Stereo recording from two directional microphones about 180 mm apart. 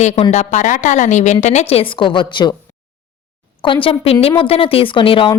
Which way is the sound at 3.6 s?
30° left (ahead or behind).